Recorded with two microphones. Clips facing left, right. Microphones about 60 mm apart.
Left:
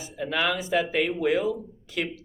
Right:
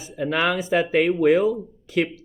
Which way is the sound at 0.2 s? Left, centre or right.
Right.